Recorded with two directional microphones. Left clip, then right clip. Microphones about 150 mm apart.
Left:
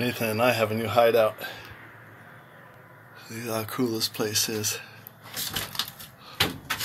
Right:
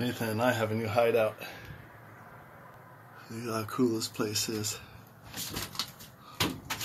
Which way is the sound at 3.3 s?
Centre (ahead or behind).